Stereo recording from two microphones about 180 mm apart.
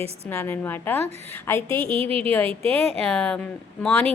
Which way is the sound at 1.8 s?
30° right (ahead or behind).